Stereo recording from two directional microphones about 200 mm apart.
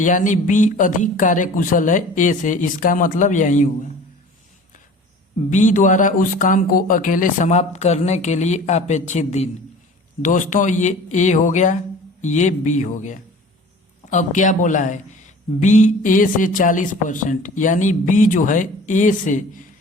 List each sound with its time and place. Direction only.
0.0 s speech: 40° left (ahead or behind)
5.5 s speech: 40° left (ahead or behind)
10.5 s speech: 40° left (ahead or behind)